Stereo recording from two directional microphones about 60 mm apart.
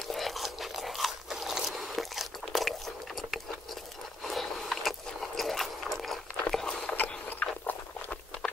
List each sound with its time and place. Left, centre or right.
0.1 s scrape: centre
4.2 s a sound: centre
7.0 s biting: left